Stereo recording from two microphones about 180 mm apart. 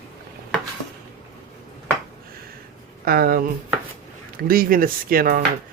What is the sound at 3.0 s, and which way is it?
Speech, 55° right (ahead or behind).